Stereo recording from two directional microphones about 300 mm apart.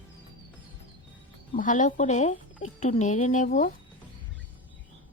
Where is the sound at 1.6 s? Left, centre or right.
Left.